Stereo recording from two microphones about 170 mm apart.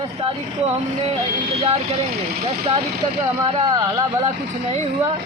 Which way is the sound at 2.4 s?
35° right (ahead or behind).